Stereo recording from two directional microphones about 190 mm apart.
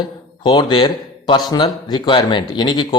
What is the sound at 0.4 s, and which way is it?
Speech, 25° left (ahead or behind).